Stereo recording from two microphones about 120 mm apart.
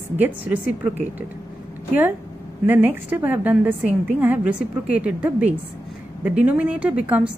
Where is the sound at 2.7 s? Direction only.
15° right (ahead or behind).